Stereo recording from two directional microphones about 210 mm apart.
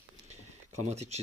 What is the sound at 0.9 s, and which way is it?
Speech, 30° right (ahead or behind).